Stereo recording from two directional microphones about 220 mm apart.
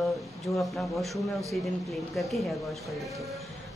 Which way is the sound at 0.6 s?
Centre (ahead or behind).